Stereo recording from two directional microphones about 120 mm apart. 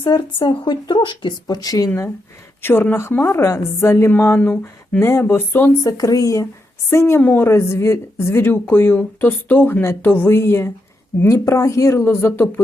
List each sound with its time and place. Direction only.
0.0 s speech: 45° left (ahead or behind)
2.6 s a woman's voice: 20° left (ahead or behind)
6.0 s a woman's voice: 30° left (ahead or behind)